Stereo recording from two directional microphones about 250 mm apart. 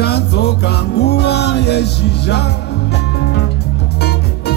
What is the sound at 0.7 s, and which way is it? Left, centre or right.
Music, left.